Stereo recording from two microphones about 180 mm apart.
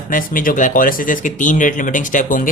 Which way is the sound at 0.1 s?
50° left (ahead or behind).